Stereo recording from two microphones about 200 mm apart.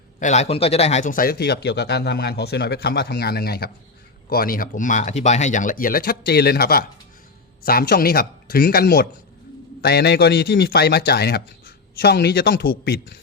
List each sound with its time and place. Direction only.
0.2 s speech: 35° left (ahead or behind); by 13.1 s 55° left (ahead or behind)